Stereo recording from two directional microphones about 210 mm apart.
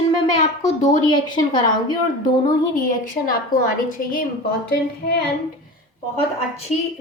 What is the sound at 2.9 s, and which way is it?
A woman's voice, 40° left (ahead or behind).